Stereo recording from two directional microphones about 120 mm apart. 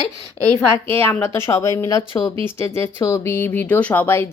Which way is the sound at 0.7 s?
20° left (ahead or behind).